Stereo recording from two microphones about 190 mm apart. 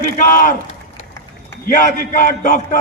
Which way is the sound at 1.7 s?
45° left (ahead or behind).